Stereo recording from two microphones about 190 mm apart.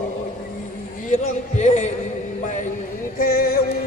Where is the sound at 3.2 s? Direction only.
50° left (ahead or behind).